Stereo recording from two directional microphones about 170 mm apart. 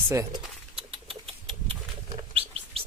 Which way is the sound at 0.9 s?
30° right (ahead or behind).